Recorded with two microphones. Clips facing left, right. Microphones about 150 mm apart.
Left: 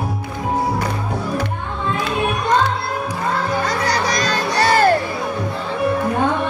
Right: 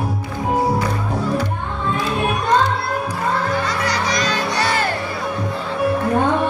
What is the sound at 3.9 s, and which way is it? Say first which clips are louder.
Music: left 1 dB; 40° left (ahead or behind).